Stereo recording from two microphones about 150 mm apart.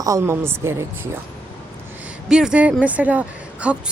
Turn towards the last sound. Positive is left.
turn(degrees=-10)  # may be behind; listen again after turning